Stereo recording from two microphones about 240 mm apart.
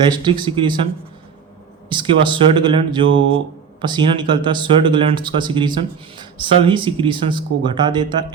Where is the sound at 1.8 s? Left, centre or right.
Right.